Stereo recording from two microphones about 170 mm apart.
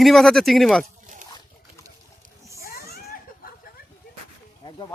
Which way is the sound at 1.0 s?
45° right (ahead or behind).